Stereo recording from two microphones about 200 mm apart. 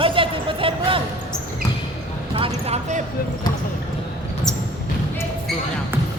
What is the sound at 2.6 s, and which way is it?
Speech, 35° right (ahead or behind).